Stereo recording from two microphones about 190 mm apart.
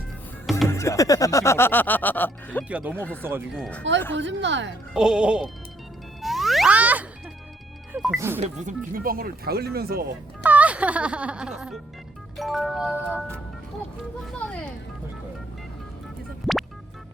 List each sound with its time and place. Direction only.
0.7 s speech: 15° left (ahead or behind)
2.6 s speech: 5° right (ahead or behind)
2.9 s speech: 5° left (ahead or behind)
3.2 s speech: 10° right (ahead or behind)
3.6 s speech: 5° left (ahead or behind)
4.1 s a woman's voice: 70° right (ahead or behind)
4.9 s music: 5° right (ahead or behind)
8.4 s speech: 45° right (ahead or behind)
10.4 s speech: 10° right (ahead or behind)
12.4 s music: centre (ahead or behind)
14.3 s speech: 5° left (ahead or behind)
16.5 s music: centre (ahead or behind)